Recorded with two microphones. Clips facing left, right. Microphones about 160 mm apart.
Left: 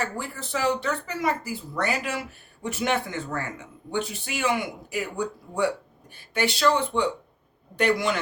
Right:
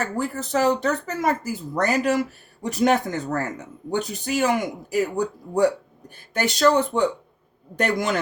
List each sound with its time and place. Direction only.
0.0 s speech: 40° right (ahead or behind)